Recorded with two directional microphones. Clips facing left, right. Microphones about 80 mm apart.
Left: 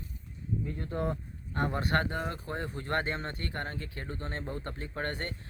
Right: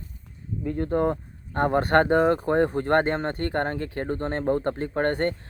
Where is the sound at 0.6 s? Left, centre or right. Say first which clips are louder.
Right 12 dB; right.